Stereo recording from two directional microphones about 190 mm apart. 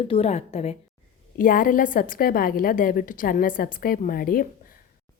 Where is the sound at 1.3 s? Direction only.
45° left (ahead or behind).